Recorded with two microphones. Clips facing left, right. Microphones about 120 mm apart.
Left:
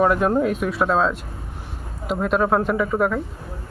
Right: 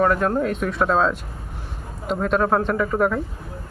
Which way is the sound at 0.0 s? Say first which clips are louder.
Left 1 dB; 10° left (ahead or behind).